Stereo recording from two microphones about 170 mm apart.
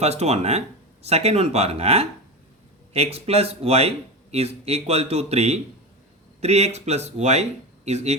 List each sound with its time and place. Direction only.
0.0 s speech: 40° right (ahead or behind)